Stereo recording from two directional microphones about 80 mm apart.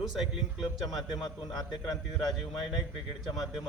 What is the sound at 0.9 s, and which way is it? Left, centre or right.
A man's voice, left.